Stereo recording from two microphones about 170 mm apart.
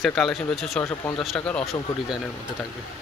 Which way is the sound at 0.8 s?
15° left (ahead or behind).